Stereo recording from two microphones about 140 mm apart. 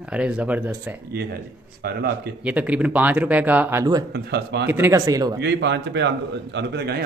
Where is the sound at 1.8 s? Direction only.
90° right.